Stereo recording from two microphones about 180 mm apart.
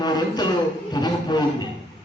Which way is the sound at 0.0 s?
25° left (ahead or behind).